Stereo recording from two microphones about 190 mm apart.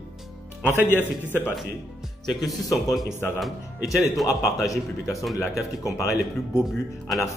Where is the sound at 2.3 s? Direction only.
Centre (ahead or behind).